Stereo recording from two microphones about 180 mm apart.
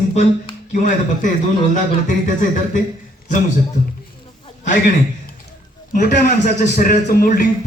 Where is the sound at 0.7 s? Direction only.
45° left (ahead or behind).